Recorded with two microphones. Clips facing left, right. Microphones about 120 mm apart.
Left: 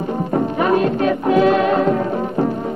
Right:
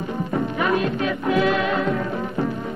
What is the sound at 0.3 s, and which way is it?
Music, 40° left (ahead or behind).